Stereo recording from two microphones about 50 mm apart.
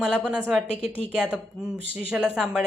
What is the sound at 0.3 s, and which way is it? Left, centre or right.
Speech, right.